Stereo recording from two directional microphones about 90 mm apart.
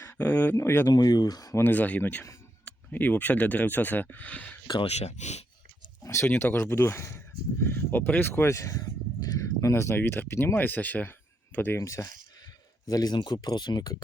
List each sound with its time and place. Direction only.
0.0 s speech: 20° left (ahead or behind)
0.9 s speech: 45° left (ahead or behind)
1.5 s speech: 20° left (ahead or behind)
6.0 s speech: 30° left (ahead or behind)
9.3 s a sound: 35° left (ahead or behind)
9.9 s speech: 20° left (ahead or behind)
11.8 s speech: 35° left (ahead or behind)